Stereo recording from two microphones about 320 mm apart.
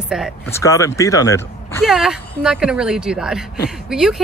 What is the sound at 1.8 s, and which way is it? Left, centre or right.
A woman's voice, centre.